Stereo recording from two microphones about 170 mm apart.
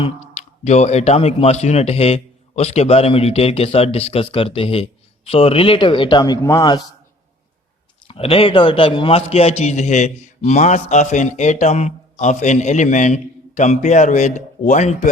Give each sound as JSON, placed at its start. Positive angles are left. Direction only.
{"t": 0.0, "sound": "speech", "side_deg": 40}
{"t": 8.0, "sound": "a man's voice", "side_deg": 35}